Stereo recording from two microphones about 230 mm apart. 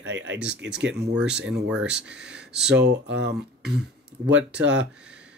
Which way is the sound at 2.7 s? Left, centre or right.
Right.